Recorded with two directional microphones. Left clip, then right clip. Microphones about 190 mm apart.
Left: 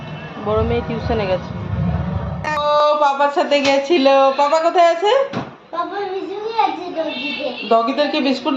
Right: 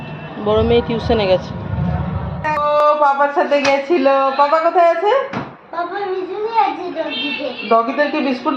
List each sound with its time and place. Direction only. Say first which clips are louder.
0.4 s speech: right 5 dB; 50° right (ahead or behind)
2.5 s a sound: right 1 dB; 5° right (ahead or behind)
7.7 s speech: right 1 dB; 5° right (ahead or behind)